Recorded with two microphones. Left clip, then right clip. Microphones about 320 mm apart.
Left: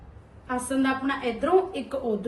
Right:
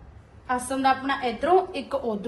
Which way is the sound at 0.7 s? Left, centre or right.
Right.